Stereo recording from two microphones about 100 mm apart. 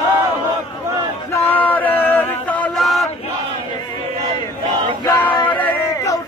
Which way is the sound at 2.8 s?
Centre (ahead or behind).